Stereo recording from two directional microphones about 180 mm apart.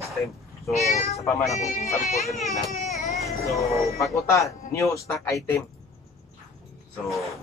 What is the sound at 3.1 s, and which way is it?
Music, centre (ahead or behind).